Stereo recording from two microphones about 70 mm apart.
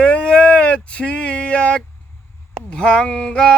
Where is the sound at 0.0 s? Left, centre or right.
Centre.